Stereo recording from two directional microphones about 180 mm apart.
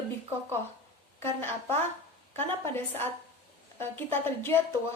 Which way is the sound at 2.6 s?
15° left (ahead or behind).